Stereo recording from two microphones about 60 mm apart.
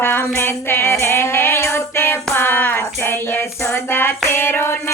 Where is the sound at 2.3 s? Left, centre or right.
Left.